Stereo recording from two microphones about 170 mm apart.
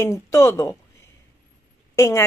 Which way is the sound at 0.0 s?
15° left (ahead or behind).